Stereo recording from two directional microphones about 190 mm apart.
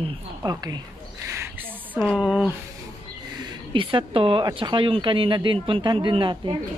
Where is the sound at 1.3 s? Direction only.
10° right (ahead or behind).